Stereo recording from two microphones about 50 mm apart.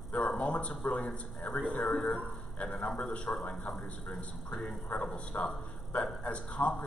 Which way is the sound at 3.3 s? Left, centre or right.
Centre.